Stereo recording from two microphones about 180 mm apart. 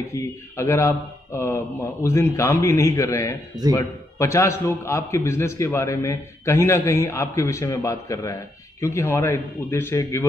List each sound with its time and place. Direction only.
0.1 s a man's voice: 15° left (ahead or behind)